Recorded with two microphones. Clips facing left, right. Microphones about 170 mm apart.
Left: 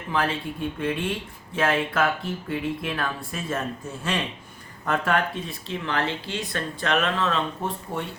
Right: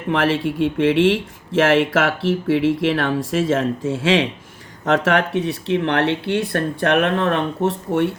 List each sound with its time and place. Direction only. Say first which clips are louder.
0.1 s speech: right 8 dB; 80° right